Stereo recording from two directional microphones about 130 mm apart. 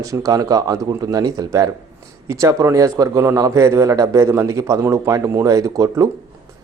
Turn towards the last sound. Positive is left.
turn(degrees=-25)  # may be behind; listen again after turning